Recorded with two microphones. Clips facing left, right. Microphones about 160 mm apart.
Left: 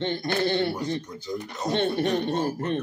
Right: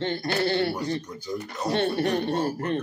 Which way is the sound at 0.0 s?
20° left (ahead or behind).